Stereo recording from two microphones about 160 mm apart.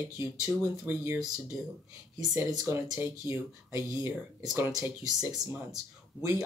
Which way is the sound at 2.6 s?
15° right (ahead or behind).